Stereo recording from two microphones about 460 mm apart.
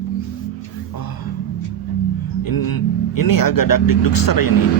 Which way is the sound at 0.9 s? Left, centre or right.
Left.